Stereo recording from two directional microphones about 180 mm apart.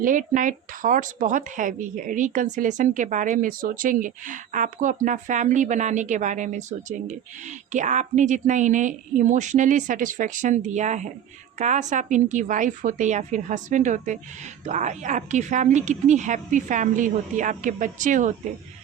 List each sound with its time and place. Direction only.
0.0 s a woman's voice: 45° right (ahead or behind)